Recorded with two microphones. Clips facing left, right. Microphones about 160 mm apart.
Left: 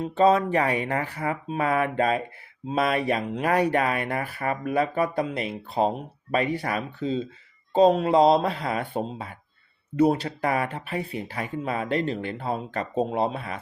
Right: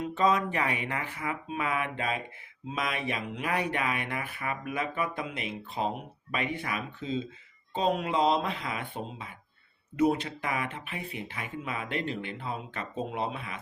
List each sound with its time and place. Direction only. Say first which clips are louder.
0.0 s speech: left 6 dB; 30° left (ahead or behind)